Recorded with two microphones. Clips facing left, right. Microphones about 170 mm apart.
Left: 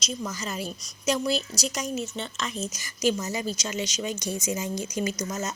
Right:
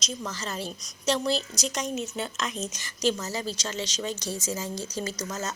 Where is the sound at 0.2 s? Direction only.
10° left (ahead or behind).